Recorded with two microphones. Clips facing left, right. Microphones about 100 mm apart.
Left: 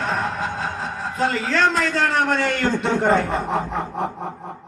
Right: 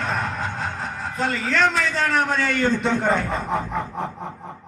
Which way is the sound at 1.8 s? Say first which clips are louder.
Left 2 dB; 60° left (ahead or behind).